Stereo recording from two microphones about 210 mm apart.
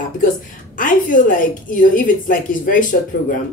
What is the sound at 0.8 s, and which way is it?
A woman's voice, 40° left (ahead or behind).